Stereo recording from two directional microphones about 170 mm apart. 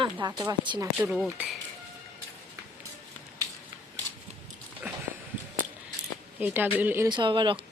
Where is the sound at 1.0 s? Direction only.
5° right (ahead or behind).